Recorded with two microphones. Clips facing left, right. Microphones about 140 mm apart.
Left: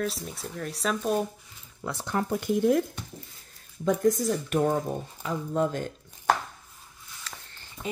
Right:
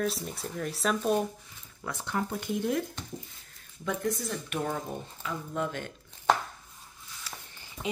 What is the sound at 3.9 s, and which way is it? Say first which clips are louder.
Speech: left 8 dB; 45° left (ahead or behind).